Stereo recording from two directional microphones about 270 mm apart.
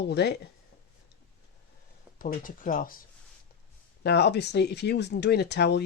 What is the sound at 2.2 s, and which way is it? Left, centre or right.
Speech, left.